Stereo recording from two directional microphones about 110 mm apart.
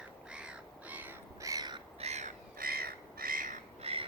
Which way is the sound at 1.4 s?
35° right (ahead or behind).